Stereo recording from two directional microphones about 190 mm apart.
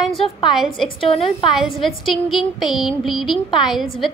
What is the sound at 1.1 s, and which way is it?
Speech, 30° left (ahead or behind).